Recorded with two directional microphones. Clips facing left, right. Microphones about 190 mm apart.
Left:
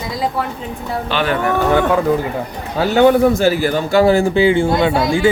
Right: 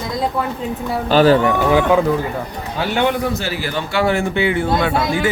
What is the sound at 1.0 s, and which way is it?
Speech, 35° right (ahead or behind).